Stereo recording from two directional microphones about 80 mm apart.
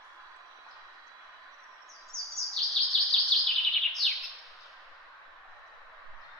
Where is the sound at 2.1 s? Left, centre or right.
Right.